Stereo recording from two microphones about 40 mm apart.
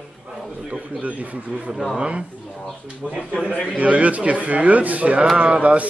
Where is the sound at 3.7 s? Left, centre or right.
Right.